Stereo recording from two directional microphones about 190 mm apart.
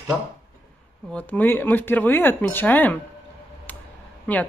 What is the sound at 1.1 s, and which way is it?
Speech, 5° left (ahead or behind).